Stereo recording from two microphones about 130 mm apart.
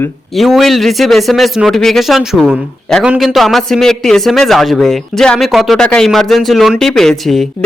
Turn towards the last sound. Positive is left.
turn(degrees=0)  # may be behind; listen again after turning